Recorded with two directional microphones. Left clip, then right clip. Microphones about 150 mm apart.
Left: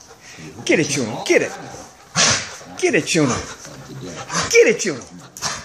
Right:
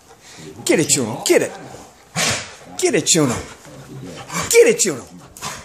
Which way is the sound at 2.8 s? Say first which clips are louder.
Right 1 dB; 30° right (ahead or behind).